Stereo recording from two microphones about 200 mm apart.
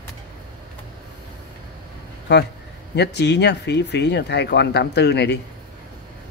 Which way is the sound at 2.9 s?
55° left (ahead or behind).